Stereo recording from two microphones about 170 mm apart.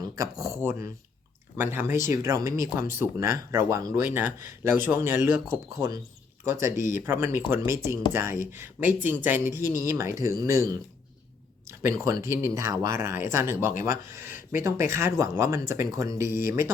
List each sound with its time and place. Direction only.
0.4 s speech: 15° right (ahead or behind)
12.0 s speech: 20° right (ahead or behind)